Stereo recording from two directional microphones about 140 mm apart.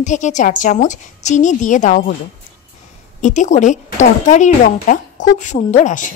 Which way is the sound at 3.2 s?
60° left (ahead or behind).